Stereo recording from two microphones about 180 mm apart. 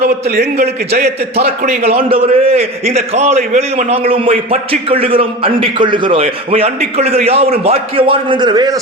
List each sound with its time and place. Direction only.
0.3 s a man's voice: 65° right (ahead or behind)
0.9 s a man's voice: 40° right (ahead or behind); by 8.8 s 20° right (ahead or behind)